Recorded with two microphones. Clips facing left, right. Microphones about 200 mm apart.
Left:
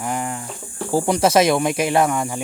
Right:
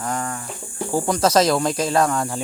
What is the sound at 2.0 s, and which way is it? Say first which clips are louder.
Speech: left 1 dB; 5° left (ahead or behind).